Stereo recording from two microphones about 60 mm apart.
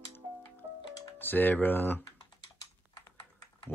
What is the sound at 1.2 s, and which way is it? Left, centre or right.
Speech, left.